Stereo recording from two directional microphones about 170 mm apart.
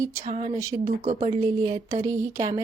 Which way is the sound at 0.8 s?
45° right (ahead or behind).